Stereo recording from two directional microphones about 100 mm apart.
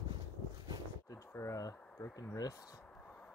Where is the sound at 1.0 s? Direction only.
30° left (ahead or behind).